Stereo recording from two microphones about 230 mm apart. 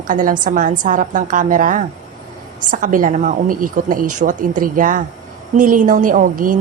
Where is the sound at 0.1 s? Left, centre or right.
Right.